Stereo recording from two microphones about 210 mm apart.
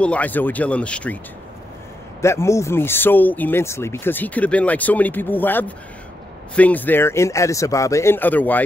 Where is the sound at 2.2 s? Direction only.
15° left (ahead or behind).